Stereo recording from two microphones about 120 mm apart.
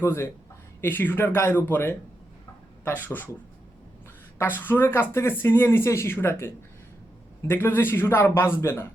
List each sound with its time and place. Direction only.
0.0 s a man's voice: 20° left (ahead or behind)
4.4 s a man's voice: 15° left (ahead or behind)